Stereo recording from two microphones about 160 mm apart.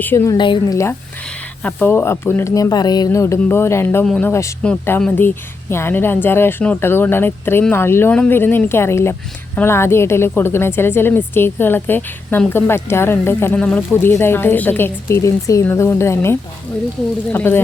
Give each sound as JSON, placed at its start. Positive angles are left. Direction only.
{"t": 0.0, "sound": "speech", "side_deg": 15}
{"t": 0.3, "sound": "a woman's voice", "side_deg": 30}
{"t": 1.6, "sound": "speech", "side_deg": 10}
{"t": 4.3, "sound": "speech", "side_deg": 20}
{"t": 4.6, "sound": "speech", "side_deg": 5}